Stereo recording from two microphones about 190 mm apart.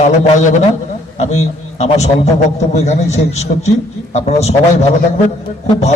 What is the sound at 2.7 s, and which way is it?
A man's voice, 35° left (ahead or behind).